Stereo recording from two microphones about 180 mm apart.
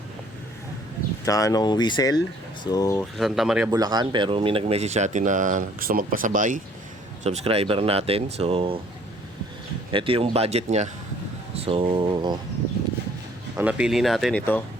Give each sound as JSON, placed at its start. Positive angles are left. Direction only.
{"t": 1.2, "sound": "speech", "side_deg": 20}
{"t": 3.0, "sound": "speech", "side_deg": 0}
{"t": 3.7, "sound": "speech", "side_deg": -20}
{"t": 7.3, "sound": "speech", "side_deg": -35}
{"t": 9.9, "sound": "speech", "side_deg": -30}
{"t": 13.6, "sound": "speech", "side_deg": -5}